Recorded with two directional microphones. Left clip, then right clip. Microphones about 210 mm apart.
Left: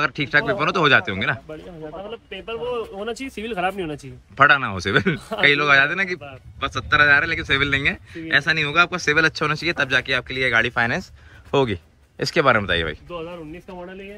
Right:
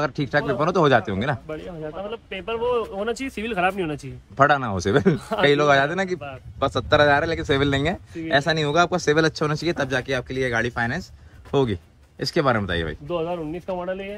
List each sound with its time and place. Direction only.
0.0 s speech: 15° right (ahead or behind)
4.4 s speech: 15° right (ahead or behind)
13.1 s speech: 45° right (ahead or behind)